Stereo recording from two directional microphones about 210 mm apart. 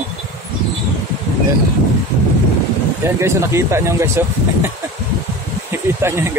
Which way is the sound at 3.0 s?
15° right (ahead or behind).